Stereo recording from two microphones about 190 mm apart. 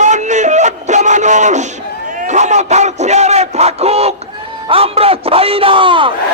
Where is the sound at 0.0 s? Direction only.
40° right (ahead or behind).